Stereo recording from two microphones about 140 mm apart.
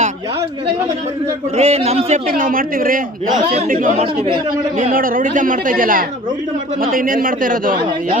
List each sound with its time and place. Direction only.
1.5 s a man's voice: 50° right (ahead or behind)
2.3 s a woman's voice: 90° right
3.7 s a woman's voice: 70° right (ahead or behind)
3.9 s a man's voice: 45° right (ahead or behind)
4.8 s a woman's voice: 90° right